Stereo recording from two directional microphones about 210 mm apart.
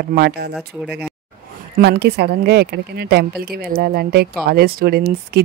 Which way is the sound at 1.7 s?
50° right (ahead or behind).